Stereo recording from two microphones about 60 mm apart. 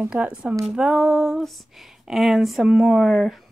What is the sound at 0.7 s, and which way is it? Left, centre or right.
Speech, centre.